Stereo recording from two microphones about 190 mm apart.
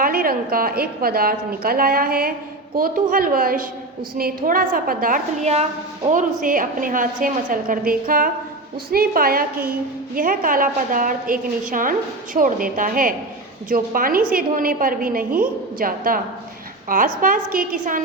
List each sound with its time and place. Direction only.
0.0 s a woman's voice: 50° right (ahead or behind)